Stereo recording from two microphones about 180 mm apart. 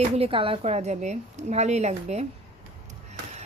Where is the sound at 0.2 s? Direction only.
30° right (ahead or behind).